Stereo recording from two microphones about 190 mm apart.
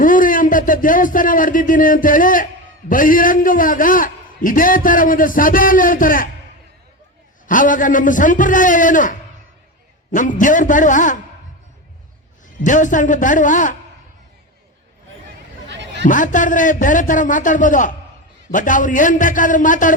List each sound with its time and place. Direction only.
0.0 s a man's voice: 45° left (ahead or behind)
7.4 s a man's voice: 45° left (ahead or behind)
10.2 s a man's voice: 45° left (ahead or behind)
12.6 s a man's voice: 40° left (ahead or behind)
15.7 s a sound: 65° right (ahead or behind)
16.0 s a man's voice: 45° left (ahead or behind)